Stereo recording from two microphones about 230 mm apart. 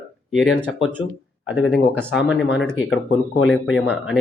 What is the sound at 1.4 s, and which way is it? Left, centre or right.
Speech, left.